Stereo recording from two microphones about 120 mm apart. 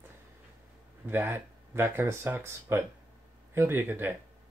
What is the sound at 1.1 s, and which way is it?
Speech, 15° right (ahead or behind).